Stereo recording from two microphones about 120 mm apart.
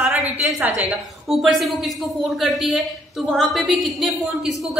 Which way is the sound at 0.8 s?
Centre (ahead or behind).